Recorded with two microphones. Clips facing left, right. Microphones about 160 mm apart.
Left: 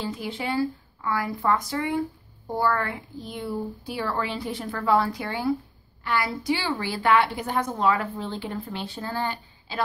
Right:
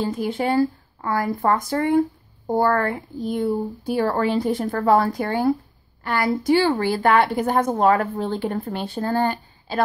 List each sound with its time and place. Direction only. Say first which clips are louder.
0.0 s a woman's voice: right 7 dB; 50° right (ahead or behind)